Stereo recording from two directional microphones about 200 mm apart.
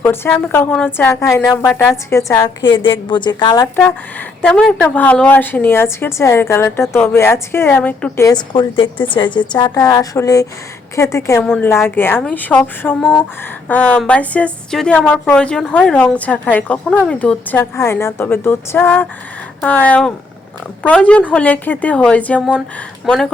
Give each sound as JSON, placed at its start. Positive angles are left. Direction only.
{"t": 0.0, "sound": "a woman's voice", "side_deg": 10}
{"t": 2.6, "sound": "a woman's voice", "side_deg": 25}
{"t": 4.4, "sound": "a woman's voice", "side_deg": 5}